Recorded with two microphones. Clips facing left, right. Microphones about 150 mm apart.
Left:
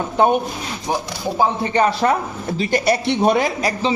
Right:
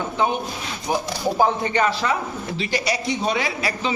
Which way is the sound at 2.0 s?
45° left (ahead or behind).